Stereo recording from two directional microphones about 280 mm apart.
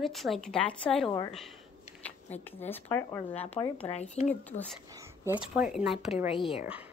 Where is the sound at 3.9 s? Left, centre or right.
Left.